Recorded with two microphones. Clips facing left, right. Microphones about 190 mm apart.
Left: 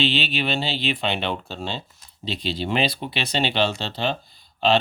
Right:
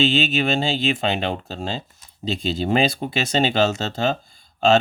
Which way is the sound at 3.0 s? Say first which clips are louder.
Right 4 dB; 40° right (ahead or behind).